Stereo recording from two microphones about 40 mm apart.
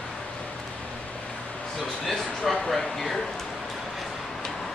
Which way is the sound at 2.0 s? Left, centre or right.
Centre.